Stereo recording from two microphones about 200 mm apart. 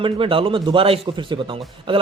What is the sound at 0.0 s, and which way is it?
A man's voice, 25° right (ahead or behind).